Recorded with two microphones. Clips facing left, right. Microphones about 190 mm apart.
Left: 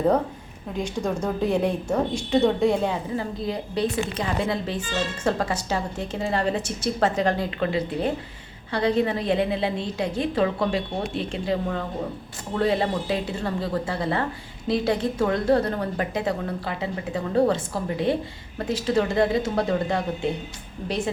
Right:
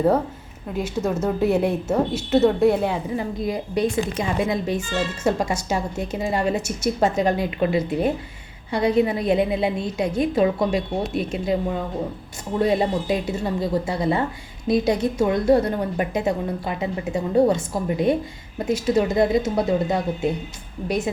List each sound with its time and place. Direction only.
0.8 s speech: 5° right (ahead or behind)